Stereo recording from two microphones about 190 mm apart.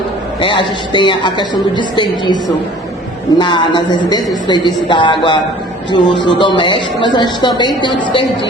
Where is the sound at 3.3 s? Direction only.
25° left (ahead or behind).